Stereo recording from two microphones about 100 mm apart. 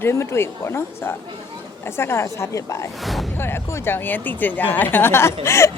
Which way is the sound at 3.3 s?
25° left (ahead or behind).